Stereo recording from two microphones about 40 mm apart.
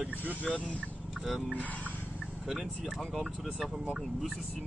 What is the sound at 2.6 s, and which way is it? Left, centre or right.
Speech, centre.